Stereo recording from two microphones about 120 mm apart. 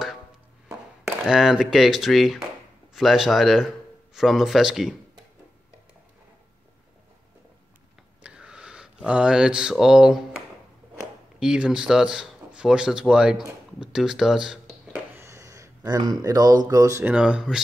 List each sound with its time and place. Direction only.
1.0 s speech: 5° right (ahead or behind)
8.2 s a sound: 5° right (ahead or behind)
11.3 s speech: 5° right (ahead or behind)
15.1 s speech: 25° right (ahead or behind)
17.0 s speech: 10° right (ahead or behind)